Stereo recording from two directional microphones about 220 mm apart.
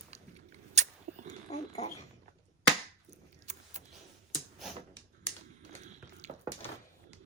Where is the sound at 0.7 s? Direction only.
30° right (ahead or behind).